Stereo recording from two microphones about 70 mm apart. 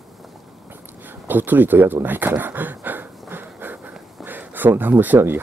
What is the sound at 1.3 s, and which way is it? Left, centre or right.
Speech, right.